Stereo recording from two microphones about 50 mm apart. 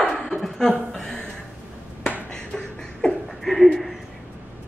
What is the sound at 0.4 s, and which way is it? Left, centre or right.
Chuckle, centre.